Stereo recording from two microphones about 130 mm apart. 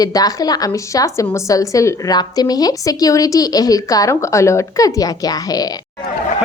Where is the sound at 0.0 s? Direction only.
30° left (ahead or behind).